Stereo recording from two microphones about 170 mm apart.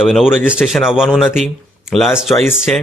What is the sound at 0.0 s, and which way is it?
A man's voice, centre (ahead or behind).